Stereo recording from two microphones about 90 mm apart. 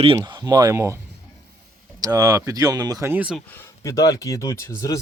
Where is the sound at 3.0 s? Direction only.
25° right (ahead or behind).